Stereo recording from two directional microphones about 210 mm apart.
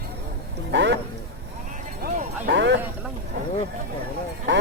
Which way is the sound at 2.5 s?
55° right (ahead or behind).